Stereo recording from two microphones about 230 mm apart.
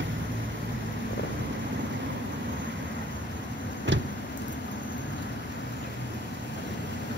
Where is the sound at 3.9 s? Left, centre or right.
Right.